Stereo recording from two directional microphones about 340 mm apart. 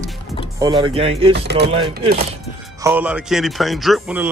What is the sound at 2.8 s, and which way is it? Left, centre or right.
Speech, centre.